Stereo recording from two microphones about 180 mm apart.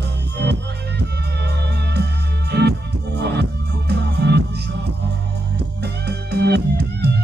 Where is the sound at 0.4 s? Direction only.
70° right (ahead or behind).